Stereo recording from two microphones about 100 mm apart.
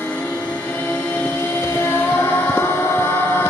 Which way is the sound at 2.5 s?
20° left (ahead or behind).